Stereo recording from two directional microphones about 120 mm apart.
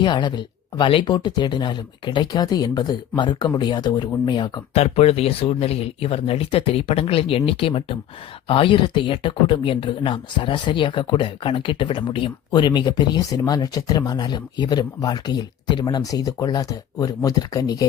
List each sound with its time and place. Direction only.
0.0 s speech: 40° left (ahead or behind)
4.7 s speech: 60° left (ahead or behind); by 17.8 s 30° left (ahead or behind)